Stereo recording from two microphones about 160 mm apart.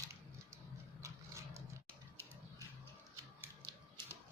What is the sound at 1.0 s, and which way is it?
Horse, 20° right (ahead or behind).